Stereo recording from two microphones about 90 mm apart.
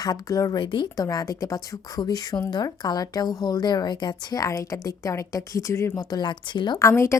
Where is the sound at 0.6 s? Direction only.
60° left (ahead or behind).